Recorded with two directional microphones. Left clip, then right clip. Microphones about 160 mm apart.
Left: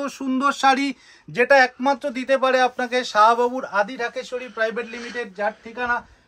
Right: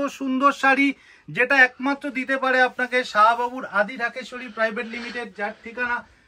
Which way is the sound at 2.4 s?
90° left.